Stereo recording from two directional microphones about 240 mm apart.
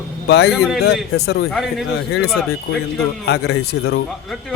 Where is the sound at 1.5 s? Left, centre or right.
Centre.